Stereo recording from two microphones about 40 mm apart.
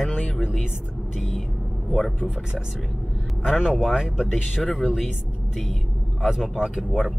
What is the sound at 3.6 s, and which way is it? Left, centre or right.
Speech, centre.